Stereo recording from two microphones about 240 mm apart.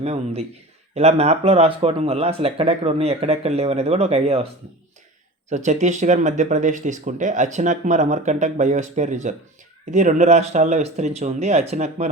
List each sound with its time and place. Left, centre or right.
0.0 s speech: right
5.5 s speech: right